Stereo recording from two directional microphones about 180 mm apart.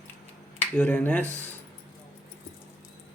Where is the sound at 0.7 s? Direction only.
10° left (ahead or behind).